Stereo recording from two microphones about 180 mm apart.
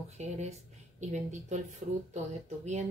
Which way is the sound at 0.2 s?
35° right (ahead or behind).